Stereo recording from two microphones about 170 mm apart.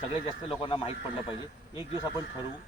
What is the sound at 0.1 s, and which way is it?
Speech, 30° left (ahead or behind).